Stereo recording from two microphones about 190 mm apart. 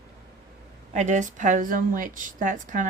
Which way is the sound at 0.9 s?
40° right (ahead or behind).